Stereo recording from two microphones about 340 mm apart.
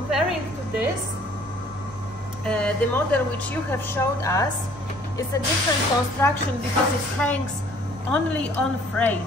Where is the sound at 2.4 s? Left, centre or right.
Centre.